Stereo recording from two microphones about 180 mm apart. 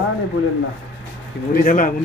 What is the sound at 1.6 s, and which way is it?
Speech, 50° left (ahead or behind).